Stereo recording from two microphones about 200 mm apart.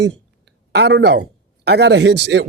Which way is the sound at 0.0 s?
60° right (ahead or behind).